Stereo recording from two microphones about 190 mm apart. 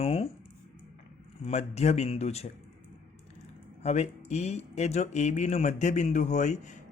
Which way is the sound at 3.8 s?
35° left (ahead or behind).